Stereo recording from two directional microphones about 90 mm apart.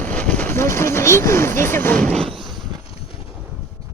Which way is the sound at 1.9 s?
10° left (ahead or behind).